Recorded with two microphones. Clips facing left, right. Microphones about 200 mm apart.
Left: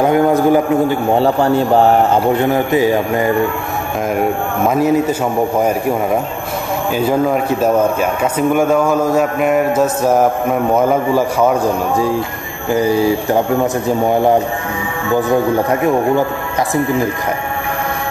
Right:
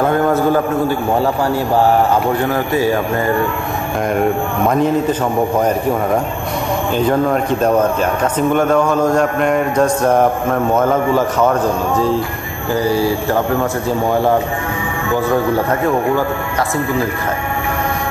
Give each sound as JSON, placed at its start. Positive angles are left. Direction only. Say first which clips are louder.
{"t": 0.0, "sound": "speech", "louder": "left 2 dB", "side_deg": 15}
{"t": 1.1, "sound": "speech", "louder": "left 6 dB", "side_deg": 25}
{"t": 4.6, "sound": "speech", "louder": "left 2 dB", "side_deg": 5}
{"t": 7.0, "sound": "speech", "louder": "left 1 dB", "side_deg": 5}
{"t": 12.7, "sound": "speech", "louder": "left 2 dB", "side_deg": 20}